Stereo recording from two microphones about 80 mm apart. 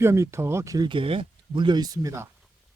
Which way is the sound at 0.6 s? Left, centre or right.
Right.